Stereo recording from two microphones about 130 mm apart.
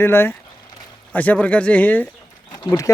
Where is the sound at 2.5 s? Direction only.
30° left (ahead or behind).